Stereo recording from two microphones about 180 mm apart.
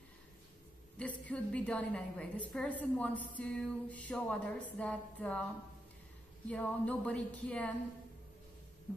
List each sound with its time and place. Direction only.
0.9 s a woman's voice: 5° left (ahead or behind)
6.5 s a woman's voice: 5° left (ahead or behind)